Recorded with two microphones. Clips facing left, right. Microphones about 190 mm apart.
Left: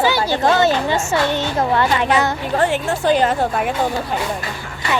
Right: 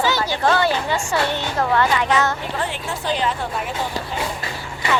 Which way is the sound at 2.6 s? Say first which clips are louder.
Left 8 dB; 50° left (ahead or behind).